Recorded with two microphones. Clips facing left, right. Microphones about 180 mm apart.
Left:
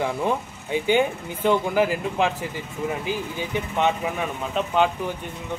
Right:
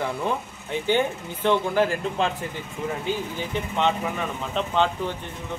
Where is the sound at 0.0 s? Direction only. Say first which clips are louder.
Left 3 dB; 15° left (ahead or behind).